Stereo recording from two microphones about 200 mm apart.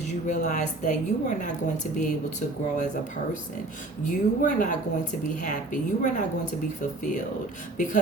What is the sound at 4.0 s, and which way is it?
A woman's voice, 40° left (ahead or behind).